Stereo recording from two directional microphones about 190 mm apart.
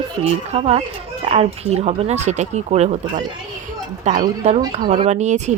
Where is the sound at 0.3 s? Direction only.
35° right (ahead or behind).